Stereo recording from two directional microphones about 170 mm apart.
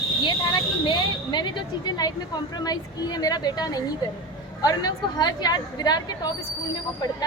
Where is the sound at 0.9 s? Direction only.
25° left (ahead or behind).